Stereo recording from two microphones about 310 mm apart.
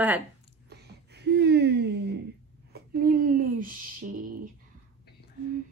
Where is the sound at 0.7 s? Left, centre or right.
Right.